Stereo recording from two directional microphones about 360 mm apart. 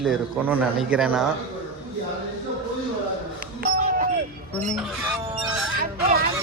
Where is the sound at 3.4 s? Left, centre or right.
Right.